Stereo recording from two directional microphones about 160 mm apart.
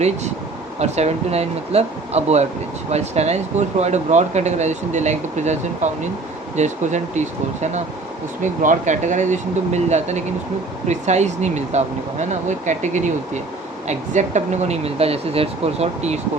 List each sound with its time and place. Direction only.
0.8 s speech: 45° right (ahead or behind)